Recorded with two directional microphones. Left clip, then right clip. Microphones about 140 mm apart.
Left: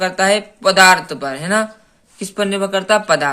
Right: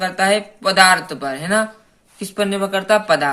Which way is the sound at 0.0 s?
35° left (ahead or behind).